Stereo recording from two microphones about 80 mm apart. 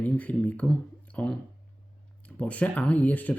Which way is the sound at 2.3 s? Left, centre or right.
Centre.